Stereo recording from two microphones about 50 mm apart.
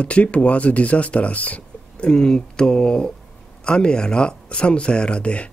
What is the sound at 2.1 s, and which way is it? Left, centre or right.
Speech, centre.